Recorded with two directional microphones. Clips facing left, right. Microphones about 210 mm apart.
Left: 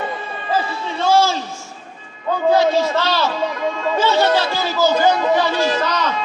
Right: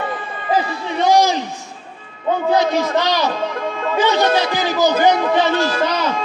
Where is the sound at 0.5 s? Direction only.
15° right (ahead or behind).